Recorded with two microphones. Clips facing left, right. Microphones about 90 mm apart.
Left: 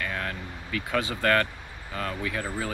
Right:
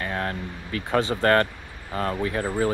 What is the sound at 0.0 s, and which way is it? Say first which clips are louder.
Vehicle: right 4 dB; 35° right (ahead or behind).